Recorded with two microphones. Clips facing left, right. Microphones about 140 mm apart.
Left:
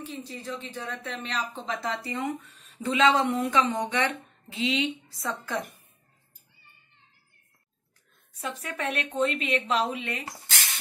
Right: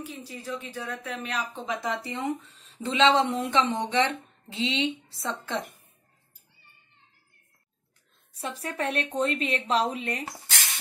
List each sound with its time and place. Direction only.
0.0 s speech: 10° right (ahead or behind)
8.4 s a woman's voice: 35° right (ahead or behind)